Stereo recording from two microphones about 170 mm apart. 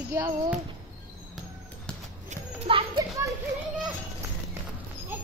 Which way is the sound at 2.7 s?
30° right (ahead or behind).